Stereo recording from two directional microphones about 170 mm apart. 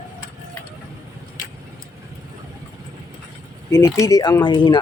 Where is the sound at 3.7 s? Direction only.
15° left (ahead or behind).